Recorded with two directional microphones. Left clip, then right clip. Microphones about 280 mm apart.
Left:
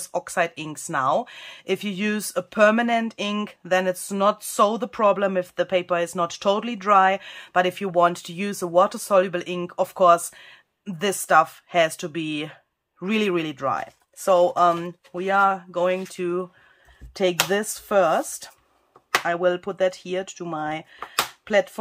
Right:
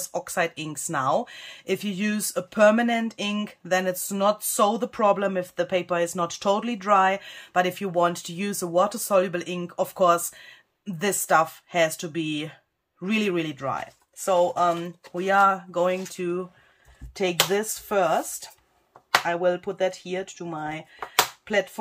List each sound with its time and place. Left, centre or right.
0.0 s speech: centre
15.1 s speech: centre
17.5 s speech: left